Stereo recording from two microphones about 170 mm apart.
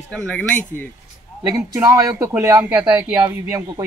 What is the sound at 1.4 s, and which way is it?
Speech, 20° right (ahead or behind).